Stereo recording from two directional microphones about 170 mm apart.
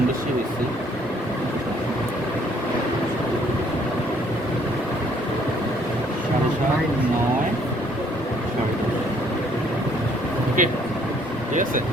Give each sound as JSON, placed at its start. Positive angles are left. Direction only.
{"t": 10.6, "sound": "speech", "side_deg": -50}